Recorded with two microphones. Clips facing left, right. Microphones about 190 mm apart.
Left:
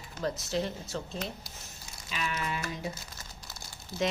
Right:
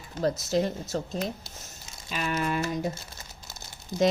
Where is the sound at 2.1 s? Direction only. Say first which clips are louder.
Right 6 dB; 50° right (ahead or behind).